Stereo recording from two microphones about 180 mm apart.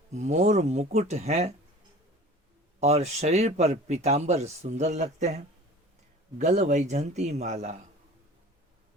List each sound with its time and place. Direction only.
0.1 s speech: 40° right (ahead or behind)
2.8 s speech: 40° right (ahead or behind)
6.4 s speech: 40° right (ahead or behind)